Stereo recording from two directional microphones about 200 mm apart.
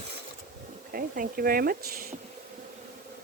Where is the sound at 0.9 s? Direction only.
45° right (ahead or behind).